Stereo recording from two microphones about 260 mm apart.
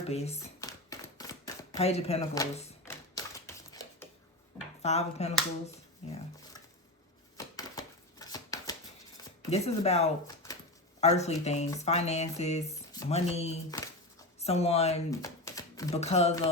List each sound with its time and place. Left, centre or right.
0.1 s speech: left
0.6 s camera: centre
1.9 s speech: left
2.8 s typewriter: centre
4.8 s speech: left
5.6 s a sound: left
9.5 s speech: left
12.6 s a sound: centre
13.1 s speech: left
15.1 s typewriter: centre
16.0 s speech: left